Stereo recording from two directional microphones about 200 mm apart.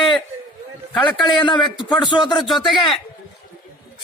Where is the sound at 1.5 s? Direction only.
25° left (ahead or behind).